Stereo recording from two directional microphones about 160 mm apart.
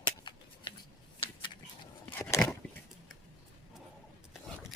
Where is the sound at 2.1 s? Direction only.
10° left (ahead or behind).